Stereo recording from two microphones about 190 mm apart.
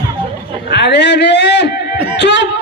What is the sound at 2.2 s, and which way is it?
Speech, 65° left (ahead or behind).